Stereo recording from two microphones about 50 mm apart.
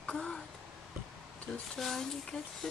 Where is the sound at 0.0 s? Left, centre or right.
Left.